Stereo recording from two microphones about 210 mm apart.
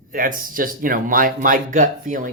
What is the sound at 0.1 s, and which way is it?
Speech, 40° right (ahead or behind).